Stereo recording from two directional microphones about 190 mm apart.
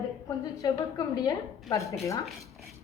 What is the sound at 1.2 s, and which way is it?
Speech, 20° left (ahead or behind).